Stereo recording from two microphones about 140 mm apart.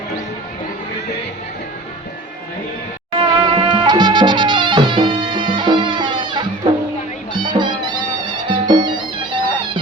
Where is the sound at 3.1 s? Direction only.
35° right (ahead or behind).